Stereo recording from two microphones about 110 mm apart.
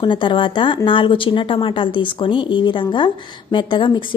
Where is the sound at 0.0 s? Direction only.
45° left (ahead or behind).